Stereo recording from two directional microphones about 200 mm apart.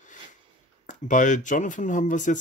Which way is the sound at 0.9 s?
40° left (ahead or behind).